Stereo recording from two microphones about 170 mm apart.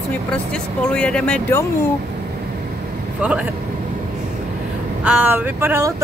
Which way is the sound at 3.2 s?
10° right (ahead or behind).